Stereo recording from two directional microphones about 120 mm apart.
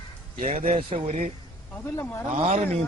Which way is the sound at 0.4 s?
80° right.